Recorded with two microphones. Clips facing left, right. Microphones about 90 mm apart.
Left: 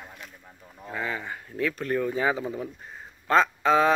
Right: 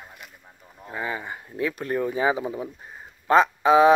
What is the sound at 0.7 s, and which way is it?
Speech, 10° right (ahead or behind).